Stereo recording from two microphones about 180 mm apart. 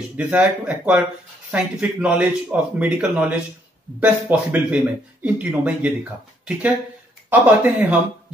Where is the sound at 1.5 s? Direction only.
5° right (ahead or behind).